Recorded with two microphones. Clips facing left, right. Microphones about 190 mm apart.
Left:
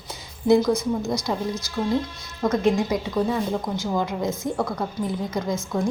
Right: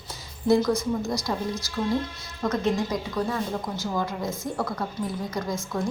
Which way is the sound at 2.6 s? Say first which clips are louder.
Left 5 dB; 15° left (ahead or behind).